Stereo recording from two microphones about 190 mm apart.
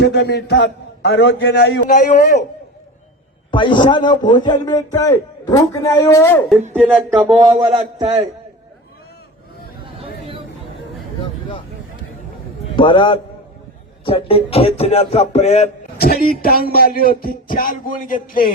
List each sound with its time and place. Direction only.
0.0 s a man's voice: 60° left (ahead or behind)
1.9 s speech: 40° left (ahead or behind)
3.5 s a man's voice: 25° left (ahead or behind)
6.7 s speech: 10° right (ahead or behind)
7.7 s a man's voice: 30° right (ahead or behind)
10.0 s a sound: 30° right (ahead or behind)
11.2 s a sound: 25° left (ahead or behind)
12.6 s a man's voice: 25° left (ahead or behind)
16.0 s speech: 50° left (ahead or behind)